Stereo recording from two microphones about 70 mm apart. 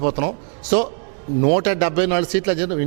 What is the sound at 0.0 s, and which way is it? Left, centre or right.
Speech, right.